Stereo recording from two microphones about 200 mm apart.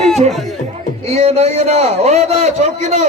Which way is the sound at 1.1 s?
30° right (ahead or behind).